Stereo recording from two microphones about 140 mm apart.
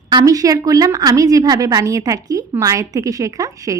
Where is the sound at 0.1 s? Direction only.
25° right (ahead or behind).